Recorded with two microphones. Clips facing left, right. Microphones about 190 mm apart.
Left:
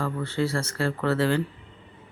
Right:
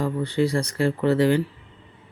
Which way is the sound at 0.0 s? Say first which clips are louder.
Right 4 dB; 15° right (ahead or behind).